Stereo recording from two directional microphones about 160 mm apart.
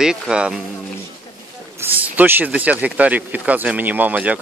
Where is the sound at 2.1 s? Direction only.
10° right (ahead or behind).